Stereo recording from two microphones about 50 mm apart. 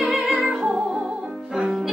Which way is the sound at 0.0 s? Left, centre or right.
Centre.